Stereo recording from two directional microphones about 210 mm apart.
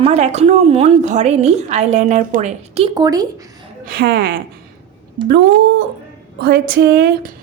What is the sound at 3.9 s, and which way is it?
Speech, 45° right (ahead or behind).